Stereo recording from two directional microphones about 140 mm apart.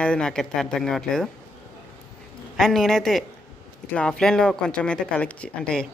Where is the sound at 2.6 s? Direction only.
5° left (ahead or behind).